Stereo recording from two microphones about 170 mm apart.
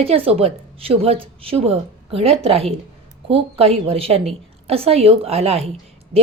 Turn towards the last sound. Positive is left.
turn(degrees=-35)  # may be behind; listen again after turning